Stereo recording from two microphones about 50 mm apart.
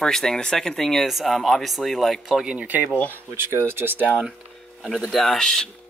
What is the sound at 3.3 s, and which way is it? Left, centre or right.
Speech, right.